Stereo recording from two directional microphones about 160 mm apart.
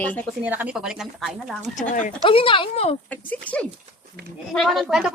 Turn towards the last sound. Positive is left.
turn(degrees=0)  # may be behind; listen again after turning